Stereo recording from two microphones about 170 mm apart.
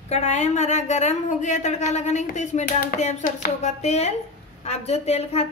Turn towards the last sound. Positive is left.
turn(degrees=35)  # may be behind; listen again after turning